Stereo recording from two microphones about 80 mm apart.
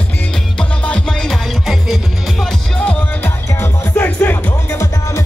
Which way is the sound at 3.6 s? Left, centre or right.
Left.